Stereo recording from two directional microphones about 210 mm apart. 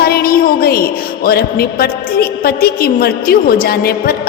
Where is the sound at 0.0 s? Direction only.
45° left (ahead or behind).